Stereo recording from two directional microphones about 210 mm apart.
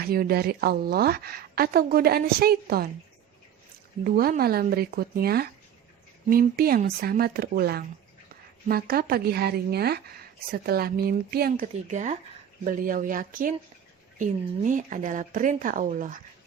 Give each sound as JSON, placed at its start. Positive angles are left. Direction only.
{"t": 0.0, "sound": "speech", "side_deg": -45}
{"t": 4.0, "sound": "speech", "side_deg": -45}